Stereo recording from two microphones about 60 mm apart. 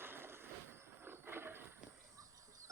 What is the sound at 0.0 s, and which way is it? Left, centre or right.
Vehicle, right.